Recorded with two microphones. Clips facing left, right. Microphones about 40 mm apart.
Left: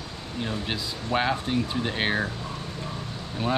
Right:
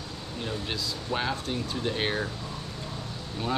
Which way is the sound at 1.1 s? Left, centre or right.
Left.